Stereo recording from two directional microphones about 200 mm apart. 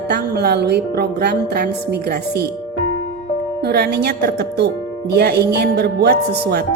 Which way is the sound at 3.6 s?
55° right (ahead or behind).